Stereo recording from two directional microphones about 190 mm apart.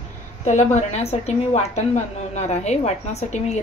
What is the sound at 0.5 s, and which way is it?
A woman's voice, 40° left (ahead or behind).